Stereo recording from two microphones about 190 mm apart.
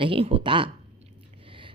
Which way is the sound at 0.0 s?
30° right (ahead or behind).